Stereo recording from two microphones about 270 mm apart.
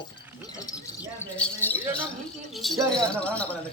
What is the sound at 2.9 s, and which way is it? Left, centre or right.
Speech, centre.